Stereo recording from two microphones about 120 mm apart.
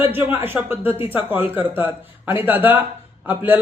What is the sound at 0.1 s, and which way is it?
A man's voice, 15° right (ahead or behind).